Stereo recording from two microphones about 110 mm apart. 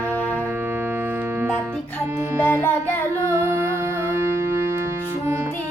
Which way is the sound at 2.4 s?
20° left (ahead or behind).